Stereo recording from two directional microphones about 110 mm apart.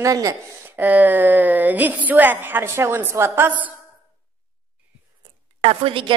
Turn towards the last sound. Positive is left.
turn(degrees=-55)  # may be behind; listen again after turning